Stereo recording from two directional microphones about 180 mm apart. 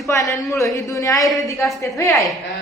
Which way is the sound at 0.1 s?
15° left (ahead or behind).